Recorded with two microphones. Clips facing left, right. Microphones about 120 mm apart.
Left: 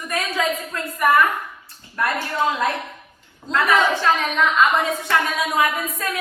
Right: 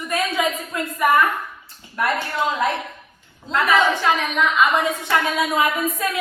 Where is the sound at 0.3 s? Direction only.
15° right (ahead or behind).